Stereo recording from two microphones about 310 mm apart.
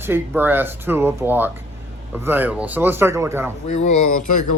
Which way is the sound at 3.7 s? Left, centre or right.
Left.